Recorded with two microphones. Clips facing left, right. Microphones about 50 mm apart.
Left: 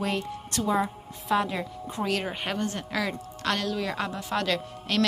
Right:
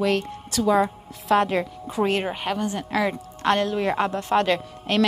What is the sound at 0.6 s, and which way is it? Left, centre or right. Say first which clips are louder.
A woman's voice: right 6 dB; right.